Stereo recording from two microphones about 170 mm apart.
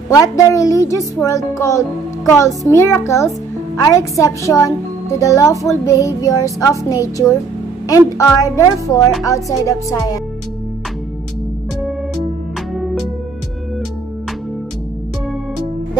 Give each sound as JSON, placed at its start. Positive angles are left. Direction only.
{"t": 0.1, "sound": "speech", "side_deg": 20}
{"t": 8.5, "sound": "speech", "side_deg": 20}
{"t": 12.7, "sound": "music", "side_deg": 0}